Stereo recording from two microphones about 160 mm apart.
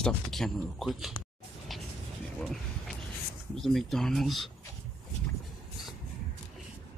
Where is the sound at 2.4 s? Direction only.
Centre (ahead or behind).